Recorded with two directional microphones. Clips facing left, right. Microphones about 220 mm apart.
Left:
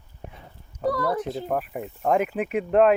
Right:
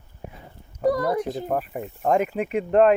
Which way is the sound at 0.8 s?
15° right (ahead or behind).